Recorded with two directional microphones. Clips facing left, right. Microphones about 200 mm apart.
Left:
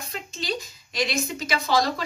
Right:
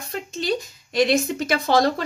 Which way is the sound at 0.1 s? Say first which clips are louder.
Right 7 dB; 55° right (ahead or behind).